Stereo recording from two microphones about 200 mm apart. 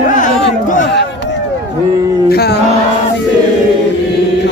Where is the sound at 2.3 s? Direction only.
55° left (ahead or behind).